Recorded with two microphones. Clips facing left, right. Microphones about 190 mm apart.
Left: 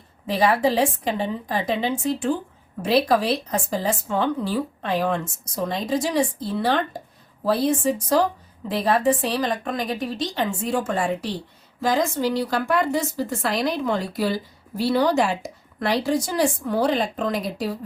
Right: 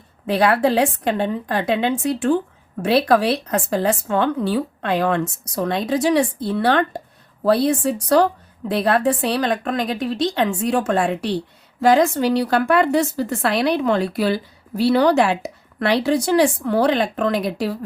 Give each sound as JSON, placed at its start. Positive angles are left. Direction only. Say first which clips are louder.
{"t": 0.3, "sound": "a woman's voice", "louder": "right 3 dB", "side_deg": -65}